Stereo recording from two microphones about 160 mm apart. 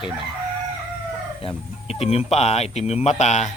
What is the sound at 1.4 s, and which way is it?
A man's voice, 35° left (ahead or behind).